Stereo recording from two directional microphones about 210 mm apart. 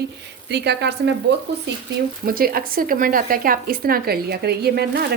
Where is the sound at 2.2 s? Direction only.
45° right (ahead or behind).